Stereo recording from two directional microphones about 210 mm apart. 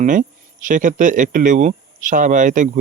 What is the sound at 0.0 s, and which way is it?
Speech, 35° right (ahead or behind).